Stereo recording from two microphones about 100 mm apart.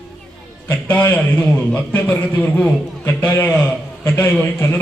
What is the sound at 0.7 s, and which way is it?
A man's voice, 20° left (ahead or behind).